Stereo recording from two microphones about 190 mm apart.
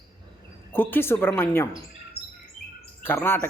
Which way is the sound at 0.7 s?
10° left (ahead or behind).